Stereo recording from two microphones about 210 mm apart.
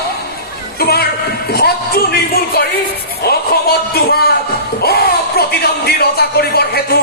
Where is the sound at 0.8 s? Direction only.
50° left (ahead or behind).